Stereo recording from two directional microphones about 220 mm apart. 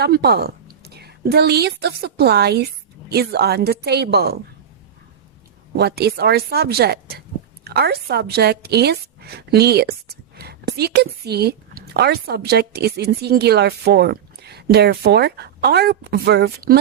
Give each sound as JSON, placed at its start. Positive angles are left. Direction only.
{"t": 0.0, "sound": "a woman's voice", "side_deg": -45}
{"t": 5.7, "sound": "a woman's voice", "side_deg": -45}